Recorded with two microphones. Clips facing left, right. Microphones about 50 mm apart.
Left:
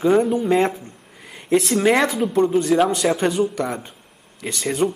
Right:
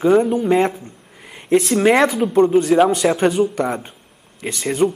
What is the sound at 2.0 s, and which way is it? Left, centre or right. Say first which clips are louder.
Speech: right 4 dB; centre.